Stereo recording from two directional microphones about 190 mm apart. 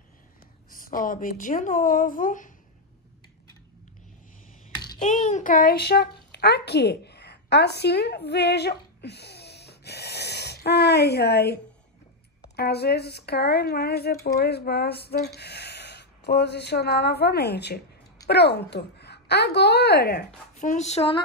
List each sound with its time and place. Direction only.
0.7 s speech: 45° left (ahead or behind)
5.0 s a child's voice: 40° left (ahead or behind)
20.5 s speech: 40° left (ahead or behind)